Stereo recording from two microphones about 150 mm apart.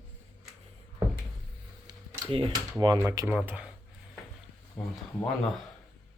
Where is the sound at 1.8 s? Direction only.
35° right (ahead or behind).